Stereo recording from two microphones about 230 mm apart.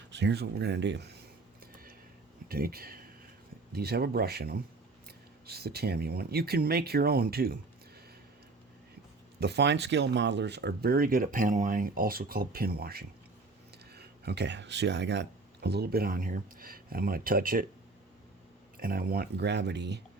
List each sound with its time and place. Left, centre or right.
0.1 s speech: right
2.5 s speech: right
9.4 s speech: right
18.8 s speech: right